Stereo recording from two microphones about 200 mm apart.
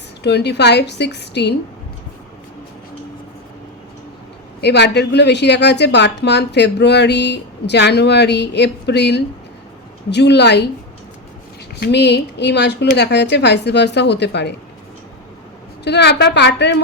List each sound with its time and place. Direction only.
0.2 s a woman's voice: 60° left (ahead or behind)
4.6 s a woman's voice: 55° left (ahead or behind)
11.8 s a woman's voice: 60° left (ahead or behind)
15.8 s a woman's voice: 60° left (ahead or behind)